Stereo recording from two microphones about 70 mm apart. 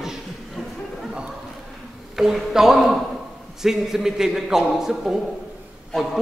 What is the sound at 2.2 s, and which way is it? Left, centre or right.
A man's voice, centre.